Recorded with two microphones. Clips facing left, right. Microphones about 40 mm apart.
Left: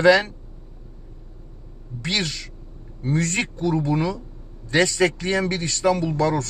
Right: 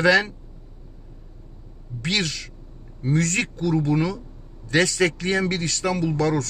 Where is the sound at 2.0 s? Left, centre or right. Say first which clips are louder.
Right 1 dB; centre; by 3.9 s left.